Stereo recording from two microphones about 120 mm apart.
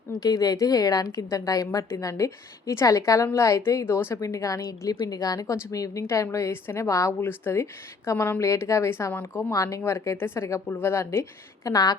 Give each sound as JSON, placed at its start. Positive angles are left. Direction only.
{"t": 0.1, "sound": "a woman's voice", "side_deg": 30}